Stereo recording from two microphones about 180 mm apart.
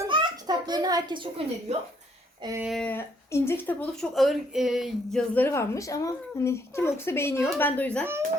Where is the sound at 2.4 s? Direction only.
20° right (ahead or behind).